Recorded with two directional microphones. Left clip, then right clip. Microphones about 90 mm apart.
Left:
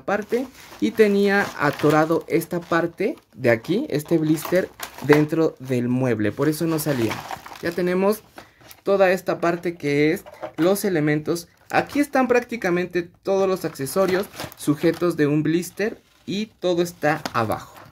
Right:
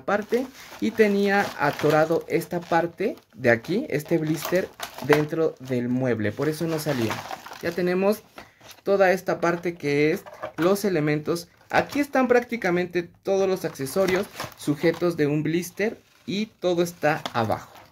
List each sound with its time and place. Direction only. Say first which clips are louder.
0.1 s speech: even; 15° left (ahead or behind)
0.7 s speech: left 3 dB; 35° left (ahead or behind)
5.3 s speech: left 3 dB; 60° left (ahead or behind)
6.1 s speech: left 4 dB; 45° left (ahead or behind); by 11.4 s 15° left (ahead or behind)
11.7 s speech: left 2 dB; 35° left (ahead or behind)